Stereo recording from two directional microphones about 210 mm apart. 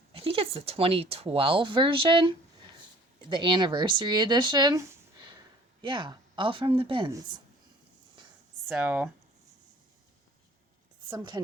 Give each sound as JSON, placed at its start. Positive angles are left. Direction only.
{"t": 0.1, "sound": "speech", "side_deg": -25}
{"t": 8.6, "sound": "speech", "side_deg": -5}